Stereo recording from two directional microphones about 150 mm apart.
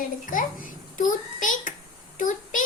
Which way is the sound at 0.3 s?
65° left (ahead or behind).